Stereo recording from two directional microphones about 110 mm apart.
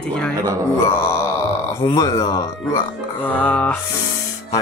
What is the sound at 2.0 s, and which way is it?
Speech, 30° left (ahead or behind).